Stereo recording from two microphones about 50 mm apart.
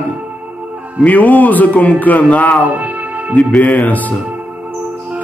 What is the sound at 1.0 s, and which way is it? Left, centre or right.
A man's voice, left.